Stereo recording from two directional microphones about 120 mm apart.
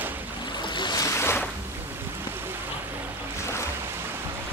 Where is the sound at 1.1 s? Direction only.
20° left (ahead or behind).